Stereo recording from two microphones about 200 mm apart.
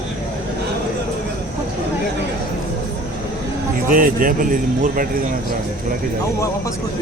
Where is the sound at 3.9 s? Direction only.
45° right (ahead or behind).